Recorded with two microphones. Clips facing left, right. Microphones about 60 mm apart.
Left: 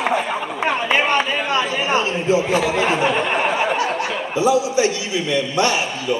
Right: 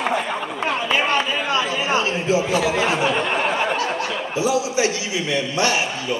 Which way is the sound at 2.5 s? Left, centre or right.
Centre.